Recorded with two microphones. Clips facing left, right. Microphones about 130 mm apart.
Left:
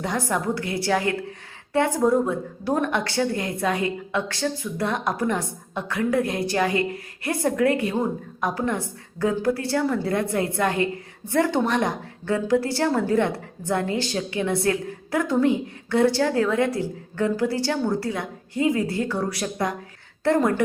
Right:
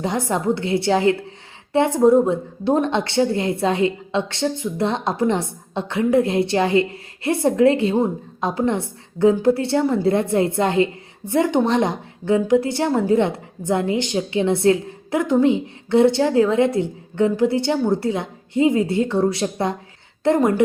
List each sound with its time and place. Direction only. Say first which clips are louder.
0.0 s a woman's voice: right 4 dB; 25° right (ahead or behind)